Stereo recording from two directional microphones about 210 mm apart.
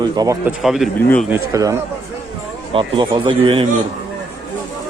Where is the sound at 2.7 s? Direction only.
25° right (ahead or behind).